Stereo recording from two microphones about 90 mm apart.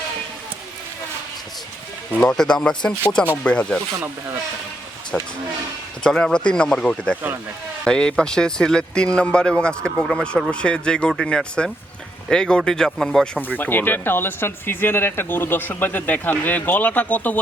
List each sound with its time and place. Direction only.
2.1 s speech: 10° left (ahead or behind)
6.0 s speech: 10° left (ahead or behind)
13.6 s speech: 20° left (ahead or behind)